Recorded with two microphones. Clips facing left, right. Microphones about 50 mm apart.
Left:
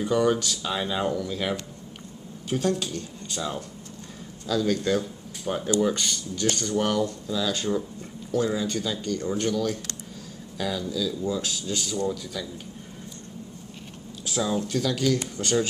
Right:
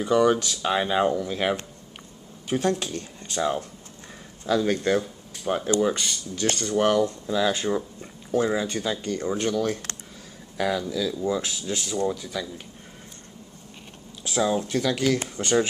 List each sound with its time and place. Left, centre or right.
0.0 s speech: right
0.3 s speech: right
5.5 s speech: centre
6.4 s speech: right
14.2 s speech: right